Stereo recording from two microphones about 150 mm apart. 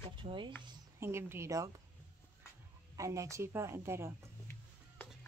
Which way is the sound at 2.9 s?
20° right (ahead or behind).